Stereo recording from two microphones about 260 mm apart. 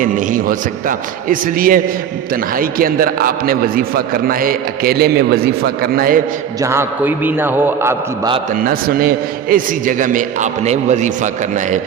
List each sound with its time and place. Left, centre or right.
0.0 s a man's voice: right
6.6 s a man's voice: centre
8.5 s a man's voice: right